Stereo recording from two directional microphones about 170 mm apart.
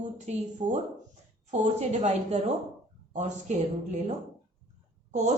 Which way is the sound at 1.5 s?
40° right (ahead or behind).